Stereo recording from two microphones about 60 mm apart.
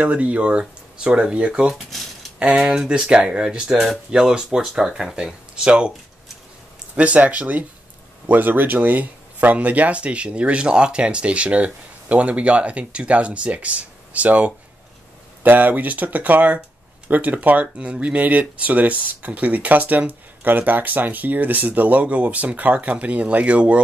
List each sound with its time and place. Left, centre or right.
0.0 s speech: right
7.0 s speech: right